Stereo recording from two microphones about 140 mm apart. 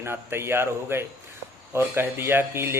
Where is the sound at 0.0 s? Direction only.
15° right (ahead or behind).